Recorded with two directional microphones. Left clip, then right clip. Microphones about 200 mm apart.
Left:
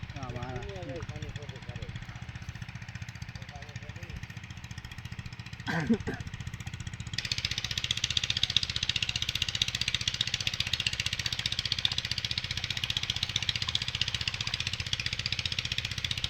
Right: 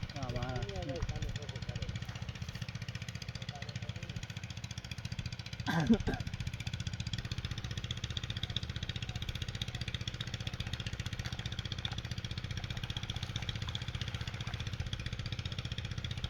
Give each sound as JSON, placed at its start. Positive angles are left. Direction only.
{"t": 5.6, "sound": "speech", "side_deg": 10}
{"t": 7.2, "sound": "vehicle", "side_deg": -50}